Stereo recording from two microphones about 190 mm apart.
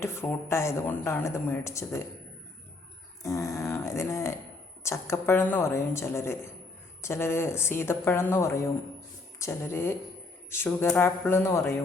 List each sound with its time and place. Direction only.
0.0 s a woman's voice: 15° left (ahead or behind)
3.2 s a sound: 15° left (ahead or behind)
4.8 s a woman's voice: 15° left (ahead or behind)